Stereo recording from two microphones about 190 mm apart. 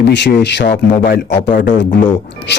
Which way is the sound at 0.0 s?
65° left (ahead or behind).